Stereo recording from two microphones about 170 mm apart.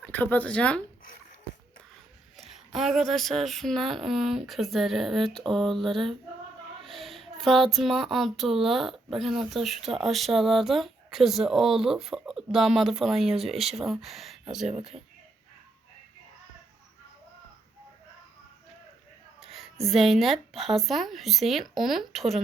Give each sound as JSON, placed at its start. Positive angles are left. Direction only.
{"t": 0.0, "sound": "speech", "side_deg": 10}
{"t": 2.3, "sound": "speech", "side_deg": 0}
{"t": 6.8, "sound": "a sound", "side_deg": 0}
{"t": 7.3, "sound": "speech", "side_deg": 0}
{"t": 14.7, "sound": "speech", "side_deg": -35}
{"t": 19.4, "sound": "speech", "side_deg": 0}